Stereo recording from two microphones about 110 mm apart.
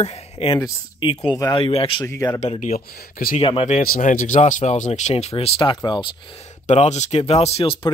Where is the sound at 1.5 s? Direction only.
55° left (ahead or behind).